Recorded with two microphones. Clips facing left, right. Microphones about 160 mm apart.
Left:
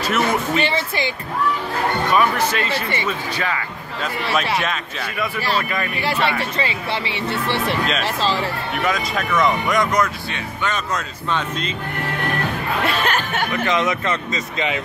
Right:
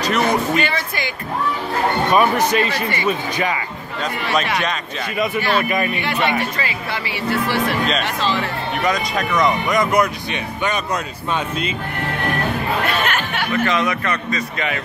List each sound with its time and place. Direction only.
0.0 s speech: 5° left (ahead or behind)
0.6 s speech: 25° left (ahead or behind)
2.1 s speech: 20° right (ahead or behind)
2.7 s speech: 25° left (ahead or behind)
3.1 s speech: 15° right (ahead or behind)
4.0 s speech: 5° left (ahead or behind)
5.6 s speech: 15° right (ahead or behind)
5.9 s speech: 35° left (ahead or behind)
7.8 s speech: centre (ahead or behind)
8.2 s speech: 35° left (ahead or behind)
8.8 s speech: centre (ahead or behind)
12.8 s speech: 35° left (ahead or behind)
13.5 s speech: 20° left (ahead or behind)